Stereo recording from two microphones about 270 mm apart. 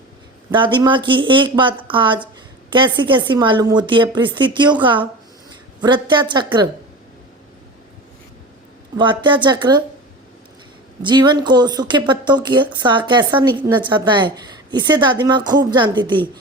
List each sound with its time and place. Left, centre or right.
0.5 s speech: centre
9.0 s speech: centre
11.0 s speech: centre